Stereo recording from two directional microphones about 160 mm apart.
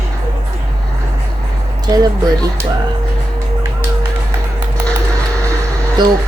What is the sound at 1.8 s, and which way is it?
Speech, 25° right (ahead or behind).